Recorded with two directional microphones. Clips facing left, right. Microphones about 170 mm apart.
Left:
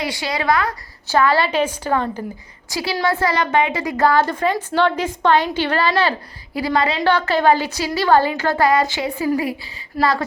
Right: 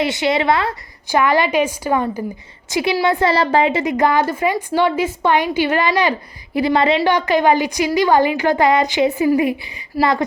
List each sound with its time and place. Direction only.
0.0 s a woman's voice: 20° right (ahead or behind)
3.3 s a woman's voice: 30° right (ahead or behind)